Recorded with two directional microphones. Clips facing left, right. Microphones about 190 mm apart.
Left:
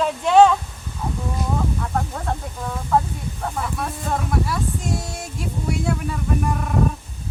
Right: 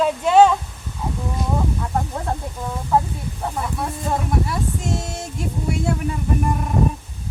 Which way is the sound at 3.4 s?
10° right (ahead or behind).